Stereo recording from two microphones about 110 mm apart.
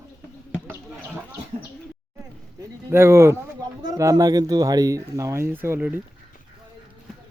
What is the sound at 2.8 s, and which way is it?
Speech, 20° right (ahead or behind).